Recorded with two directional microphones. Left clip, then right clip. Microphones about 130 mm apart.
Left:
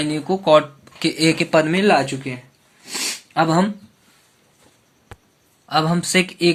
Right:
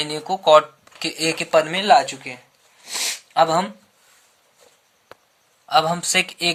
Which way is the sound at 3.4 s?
20° right (ahead or behind).